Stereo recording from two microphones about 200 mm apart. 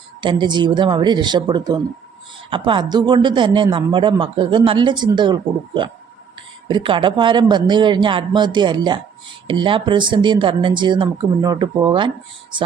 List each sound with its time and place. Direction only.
0.2 s speech: 25° right (ahead or behind)